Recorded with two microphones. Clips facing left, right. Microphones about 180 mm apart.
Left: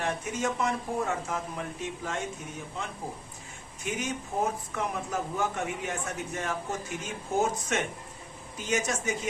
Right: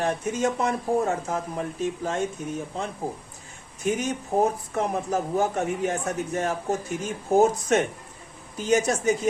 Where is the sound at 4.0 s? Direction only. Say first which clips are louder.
Right 5 dB; 35° right (ahead or behind).